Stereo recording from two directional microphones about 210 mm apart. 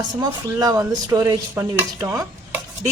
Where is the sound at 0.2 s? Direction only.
20° right (ahead or behind).